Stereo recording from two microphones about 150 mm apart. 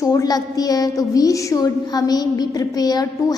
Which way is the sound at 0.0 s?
25° left (ahead or behind).